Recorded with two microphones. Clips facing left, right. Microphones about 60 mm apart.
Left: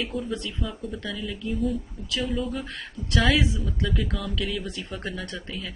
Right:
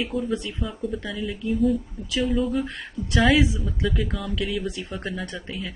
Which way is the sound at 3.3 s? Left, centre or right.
Centre.